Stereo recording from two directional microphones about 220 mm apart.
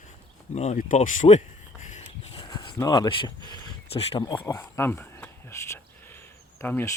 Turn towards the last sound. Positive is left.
turn(degrees=10)  # may be behind; listen again after turning